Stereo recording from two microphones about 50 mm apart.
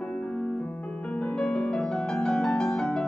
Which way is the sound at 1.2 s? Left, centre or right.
Left.